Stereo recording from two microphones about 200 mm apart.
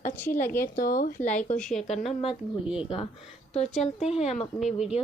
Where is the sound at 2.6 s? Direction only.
5° right (ahead or behind).